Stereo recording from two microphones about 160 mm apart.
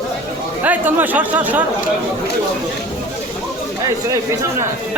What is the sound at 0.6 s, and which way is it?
Speech, 10° right (ahead or behind).